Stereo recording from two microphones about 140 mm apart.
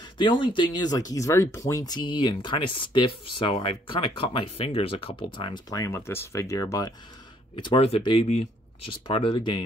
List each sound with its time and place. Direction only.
0.0 s a sound: 35° left (ahead or behind)
0.6 s speech: 30° left (ahead or behind)
7.5 s speech: 40° left (ahead or behind)
8.3 s speech: 50° left (ahead or behind)
9.0 s speech: 35° left (ahead or behind)